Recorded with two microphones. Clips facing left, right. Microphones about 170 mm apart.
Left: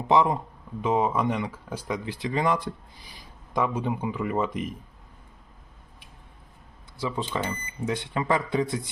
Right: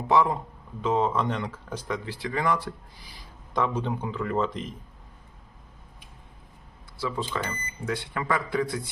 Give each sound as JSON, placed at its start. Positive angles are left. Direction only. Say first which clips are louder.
{"t": 0.1, "sound": "speech", "louder": "left 1 dB", "side_deg": 20}
{"t": 7.0, "sound": "speech", "louder": "left 1 dB", "side_deg": 20}